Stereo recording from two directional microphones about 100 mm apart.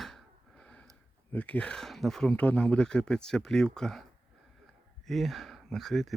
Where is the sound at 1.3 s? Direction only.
15° left (ahead or behind).